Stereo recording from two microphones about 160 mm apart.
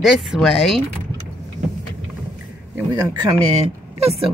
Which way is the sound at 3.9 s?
40° right (ahead or behind).